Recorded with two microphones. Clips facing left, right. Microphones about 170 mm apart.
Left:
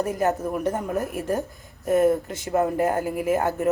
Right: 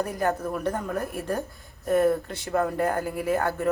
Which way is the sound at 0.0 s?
20° left (ahead or behind).